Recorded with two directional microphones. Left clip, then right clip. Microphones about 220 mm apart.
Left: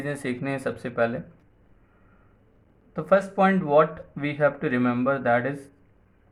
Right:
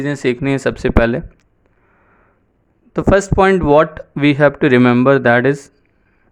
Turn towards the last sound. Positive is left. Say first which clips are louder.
# right 11 dB
turn(degrees=-50)  # may be behind; listen again after turning